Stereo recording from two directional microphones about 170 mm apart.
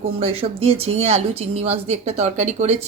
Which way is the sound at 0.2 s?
35° right (ahead or behind).